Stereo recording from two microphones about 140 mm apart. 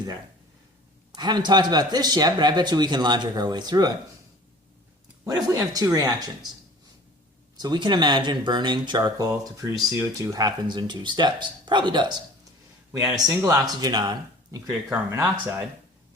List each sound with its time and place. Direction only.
1.1 s speech: 30° right (ahead or behind)
5.2 s speech: 25° right (ahead or behind)
7.5 s speech: 30° right (ahead or behind)
13.1 s speech: 25° right (ahead or behind)